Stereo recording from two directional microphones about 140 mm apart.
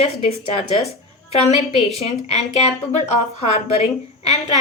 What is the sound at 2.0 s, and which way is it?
Speech, 50° left (ahead or behind).